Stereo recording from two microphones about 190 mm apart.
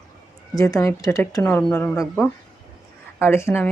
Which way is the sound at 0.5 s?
20° left (ahead or behind).